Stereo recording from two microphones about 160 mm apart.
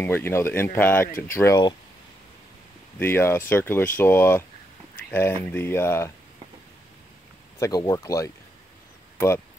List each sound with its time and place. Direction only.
0.0 s speech: 15° left (ahead or behind)
3.0 s speech: 15° left (ahead or behind)
7.5 s speech: 20° left (ahead or behind)